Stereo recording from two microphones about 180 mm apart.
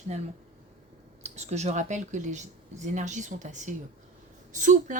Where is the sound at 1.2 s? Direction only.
40° right (ahead or behind).